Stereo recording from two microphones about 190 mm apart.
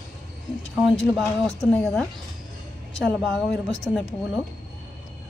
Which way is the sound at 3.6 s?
20° right (ahead or behind).